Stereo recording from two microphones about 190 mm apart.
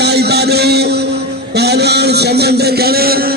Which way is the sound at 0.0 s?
60° right (ahead or behind).